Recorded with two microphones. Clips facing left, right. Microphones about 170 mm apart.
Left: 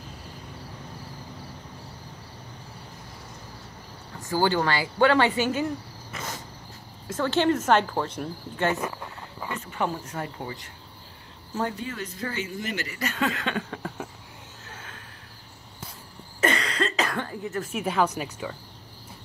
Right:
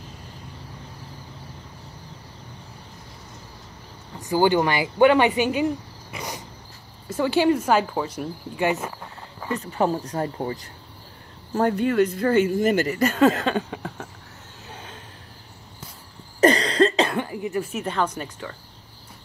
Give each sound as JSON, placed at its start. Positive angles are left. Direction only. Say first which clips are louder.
{"t": 4.2, "sound": "speech", "louder": "right 5 dB", "side_deg": -15}
{"t": 6.1, "sound": "cricket", "louder": "right 3 dB", "side_deg": -15}
{"t": 7.2, "sound": "speech", "louder": "right 3 dB", "side_deg": -10}
{"t": 9.5, "sound": "speech", "louder": "right 7 dB", "side_deg": -35}
{"t": 11.5, "sound": "speech", "louder": "right 10 dB", "side_deg": -60}
{"t": 14.7, "sound": "a sound", "louder": "right 4 dB", "side_deg": -15}
{"t": 16.3, "sound": "cough", "louder": "right 9 dB", "side_deg": -35}
{"t": 17.2, "sound": "cough", "louder": "right 4 dB", "side_deg": -15}
{"t": 17.6, "sound": "speech", "louder": "left 1 dB", "side_deg": 5}